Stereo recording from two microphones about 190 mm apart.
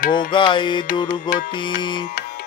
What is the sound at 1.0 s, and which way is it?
Music, 45° left (ahead or behind).